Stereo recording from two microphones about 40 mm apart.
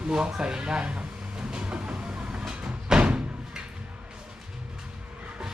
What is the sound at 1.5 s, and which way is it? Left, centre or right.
Train, right.